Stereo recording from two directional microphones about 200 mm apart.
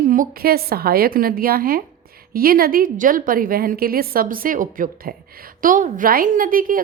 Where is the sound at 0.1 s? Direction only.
45° right (ahead or behind).